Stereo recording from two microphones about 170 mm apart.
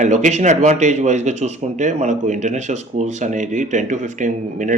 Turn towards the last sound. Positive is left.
turn(degrees=-50)  # may be behind; listen again after turning